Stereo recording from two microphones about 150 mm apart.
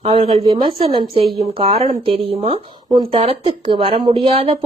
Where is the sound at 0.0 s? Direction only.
40° right (ahead or behind).